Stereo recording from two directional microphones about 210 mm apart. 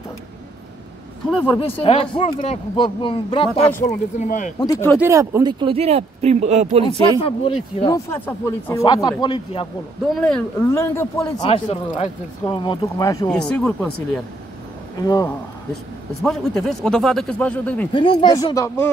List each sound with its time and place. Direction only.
1.5 s speech: 25° left (ahead or behind)
4.6 s speech: 15° left (ahead or behind)
4.9 s speech: 10° right (ahead or behind); by 6.8 s 30° right (ahead or behind)
6.8 s speech: 25° left (ahead or behind)
8.1 s speech: 10° left (ahead or behind)
10.1 s a man's voice: 5° left (ahead or behind)
11.4 s speech: 30° left (ahead or behind)
13.3 s a man's voice: 5° left (ahead or behind)
15.0 s speech: 15° left (ahead or behind)
15.7 s a man's voice: centre (ahead or behind)
17.9 s speech: 20° left (ahead or behind)